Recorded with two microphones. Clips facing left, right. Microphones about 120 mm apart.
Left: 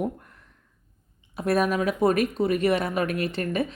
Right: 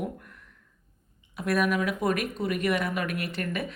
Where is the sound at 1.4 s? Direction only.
30° left (ahead or behind).